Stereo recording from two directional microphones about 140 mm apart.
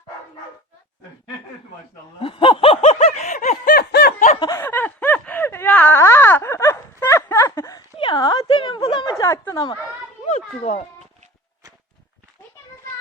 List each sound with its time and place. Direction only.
2.2 s snicker: 40° left (ahead or behind); by 3.6 s 55° left (ahead or behind)
3.7 s snicker: 80° left
4.4 s snicker: 25° left (ahead or behind)
4.6 s wail: 15° left (ahead or behind)
7.9 s a sound: 35° left (ahead or behind)
10.2 s children playing: 50° left (ahead or behind)